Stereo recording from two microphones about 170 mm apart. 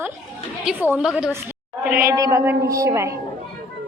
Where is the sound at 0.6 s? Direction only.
5° right (ahead or behind).